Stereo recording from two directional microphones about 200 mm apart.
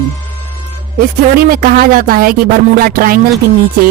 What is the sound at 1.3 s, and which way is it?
Speech, 45° right (ahead or behind).